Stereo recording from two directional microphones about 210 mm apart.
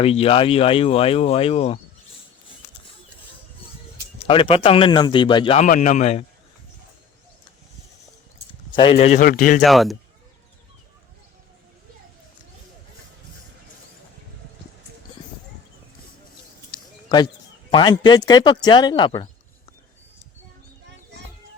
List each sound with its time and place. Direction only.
0.0 s speech: 25° left (ahead or behind)
4.2 s speech: 25° left (ahead or behind)
5.6 s a man's voice: 35° left (ahead or behind)
8.7 s a man's voice: 25° left (ahead or behind); by 9.6 s 40° left (ahead or behind)
9.6 s speech: centre (ahead or behind)
16.7 s a sound: 20° left (ahead or behind)
17.7 s speech: 20° left (ahead or behind)